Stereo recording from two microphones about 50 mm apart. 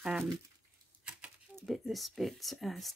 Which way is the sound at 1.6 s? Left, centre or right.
Centre.